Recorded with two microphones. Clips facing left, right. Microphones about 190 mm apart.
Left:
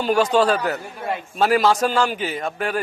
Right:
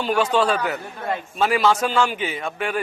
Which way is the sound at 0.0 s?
40° left (ahead or behind).